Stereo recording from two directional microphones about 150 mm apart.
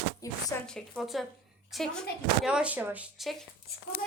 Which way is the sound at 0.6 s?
5° left (ahead or behind).